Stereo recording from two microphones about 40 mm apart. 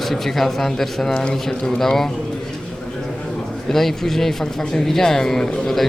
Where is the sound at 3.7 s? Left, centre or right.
Centre.